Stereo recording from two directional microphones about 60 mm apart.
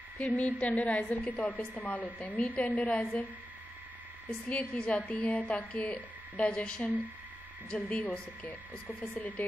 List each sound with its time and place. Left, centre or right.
0.2 s a woman's voice: left
4.3 s a woman's voice: centre